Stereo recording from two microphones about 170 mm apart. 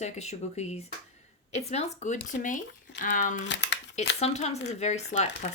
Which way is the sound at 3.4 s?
90° left.